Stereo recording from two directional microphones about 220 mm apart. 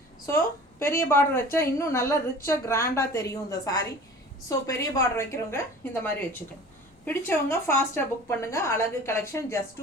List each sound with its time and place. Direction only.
0.3 s a woman's voice: 10° left (ahead or behind)
7.0 s a woman's voice: 10° left (ahead or behind)